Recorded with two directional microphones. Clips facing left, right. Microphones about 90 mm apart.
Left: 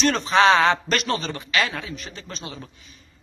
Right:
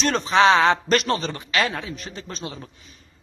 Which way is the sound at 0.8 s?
30° right (ahead or behind).